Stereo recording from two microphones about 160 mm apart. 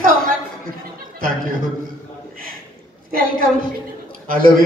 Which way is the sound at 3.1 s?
65° right (ahead or behind).